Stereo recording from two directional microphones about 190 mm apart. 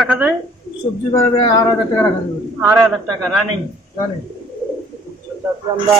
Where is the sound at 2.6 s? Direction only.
Centre (ahead or behind).